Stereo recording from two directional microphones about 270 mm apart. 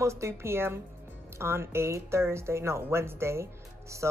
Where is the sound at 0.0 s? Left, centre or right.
Centre.